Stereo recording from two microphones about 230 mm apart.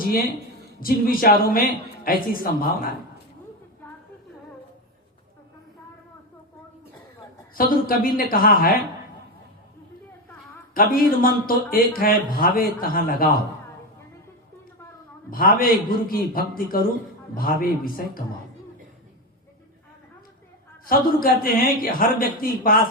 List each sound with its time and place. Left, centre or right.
0.8 s a man's voice: left
7.5 s a man's voice: left
10.8 s a man's voice: left
15.3 s a man's voice: left
20.8 s a man's voice: left